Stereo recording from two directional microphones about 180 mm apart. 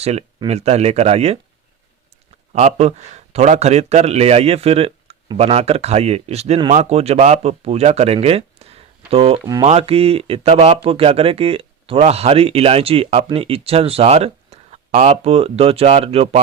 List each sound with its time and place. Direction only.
0.0 s a man's voice: 35° right (ahead or behind)
2.5 s a man's voice: 40° right (ahead or behind)